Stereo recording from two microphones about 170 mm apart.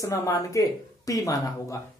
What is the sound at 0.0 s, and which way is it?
Speech, 20° left (ahead or behind).